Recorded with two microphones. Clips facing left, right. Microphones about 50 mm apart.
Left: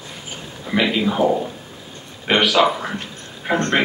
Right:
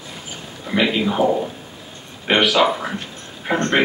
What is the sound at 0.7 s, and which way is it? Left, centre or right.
Speech, centre.